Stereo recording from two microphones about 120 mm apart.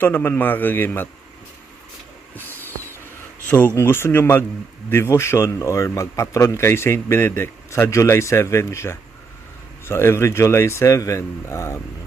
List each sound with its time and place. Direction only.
0.0 s a man's voice: 15° left (ahead or behind)
3.8 s speech: 20° left (ahead or behind)